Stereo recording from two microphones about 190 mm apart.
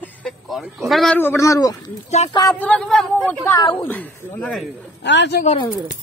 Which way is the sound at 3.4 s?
15° left (ahead or behind).